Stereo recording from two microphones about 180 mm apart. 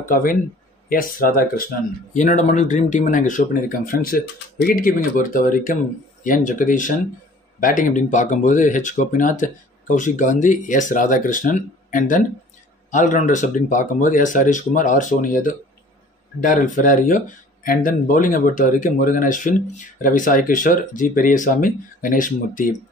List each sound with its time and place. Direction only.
0.0 s speech: 50° left (ahead or behind)